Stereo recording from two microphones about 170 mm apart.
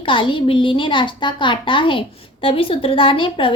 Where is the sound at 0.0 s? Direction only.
30° left (ahead or behind).